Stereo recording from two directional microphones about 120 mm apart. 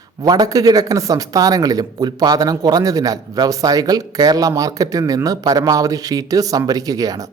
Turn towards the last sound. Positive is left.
turn(degrees=-30)  # may be behind; listen again after turning